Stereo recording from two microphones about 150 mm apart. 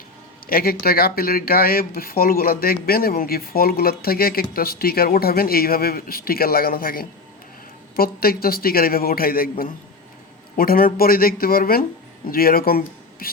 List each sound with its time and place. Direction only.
0.4 s speech: 80° left
7.9 s speech: 85° left